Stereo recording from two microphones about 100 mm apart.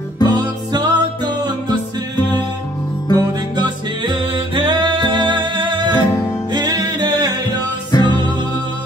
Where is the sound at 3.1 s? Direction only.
50° right (ahead or behind).